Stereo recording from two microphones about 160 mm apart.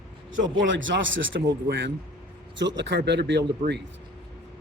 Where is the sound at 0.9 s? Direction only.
90° right.